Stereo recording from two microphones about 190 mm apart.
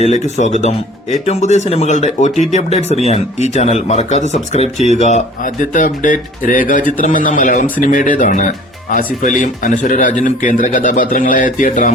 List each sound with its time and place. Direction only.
0.0 s speech: 40° left (ahead or behind)